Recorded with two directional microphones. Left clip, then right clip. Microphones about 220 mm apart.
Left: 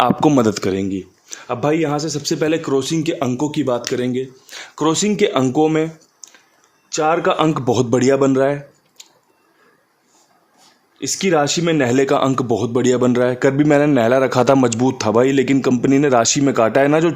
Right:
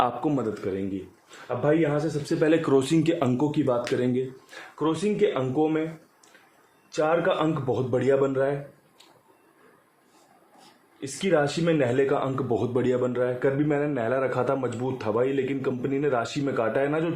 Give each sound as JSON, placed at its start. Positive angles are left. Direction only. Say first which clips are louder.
{"t": 0.0, "sound": "a man's voice", "louder": "left 11 dB", "side_deg": 40}
{"t": 2.4, "sound": "speech", "louder": "left 3 dB", "side_deg": 20}
{"t": 4.7, "sound": "a man's voice", "louder": "left 8 dB", "side_deg": 50}
{"t": 6.9, "sound": "a man's voice", "louder": "left 7 dB", "side_deg": 45}
{"t": 11.0, "sound": "a man's voice", "louder": "left 7 dB", "side_deg": 50}
{"t": 12.5, "sound": "a man's voice", "louder": "left 6 dB", "side_deg": 35}